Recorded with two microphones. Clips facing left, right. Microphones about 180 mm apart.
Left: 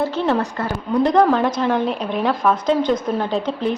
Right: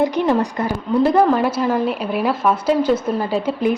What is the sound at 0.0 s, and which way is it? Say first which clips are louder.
Speech: right 3 dB; 15° right (ahead or behind).